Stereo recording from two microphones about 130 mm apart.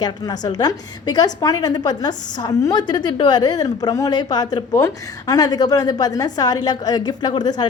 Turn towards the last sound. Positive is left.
turn(degrees=30)  # may be behind; listen again after turning